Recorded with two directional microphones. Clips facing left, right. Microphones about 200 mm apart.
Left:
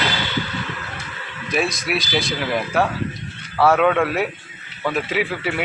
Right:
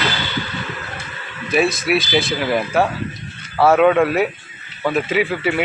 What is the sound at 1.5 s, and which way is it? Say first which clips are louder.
Speech: right 5 dB; 5° right (ahead or behind).